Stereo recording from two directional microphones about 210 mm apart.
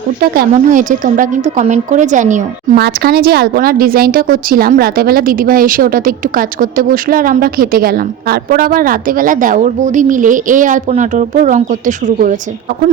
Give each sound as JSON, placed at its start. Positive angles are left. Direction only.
{"t": 0.2, "sound": "a woman's voice", "side_deg": -40}
{"t": 2.8, "sound": "a woman's voice", "side_deg": -45}